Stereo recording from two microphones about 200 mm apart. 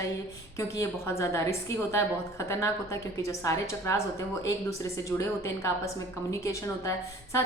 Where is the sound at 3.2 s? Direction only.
15° left (ahead or behind).